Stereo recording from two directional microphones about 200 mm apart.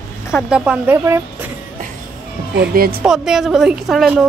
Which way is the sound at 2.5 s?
50° right (ahead or behind).